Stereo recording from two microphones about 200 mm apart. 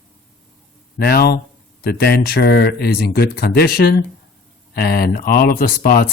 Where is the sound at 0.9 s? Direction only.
50° left (ahead or behind).